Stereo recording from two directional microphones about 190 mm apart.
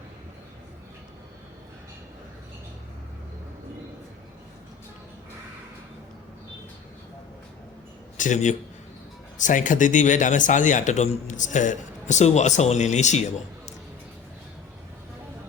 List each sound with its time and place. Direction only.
8.2 s speech: 40° left (ahead or behind)